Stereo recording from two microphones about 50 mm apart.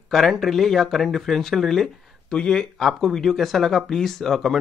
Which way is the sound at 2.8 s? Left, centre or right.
Centre.